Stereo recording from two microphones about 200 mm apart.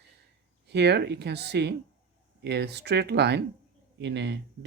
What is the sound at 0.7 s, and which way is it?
Speech, 55° right (ahead or behind).